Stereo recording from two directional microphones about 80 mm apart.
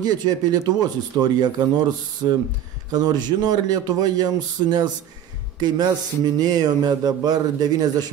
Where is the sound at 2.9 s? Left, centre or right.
Right.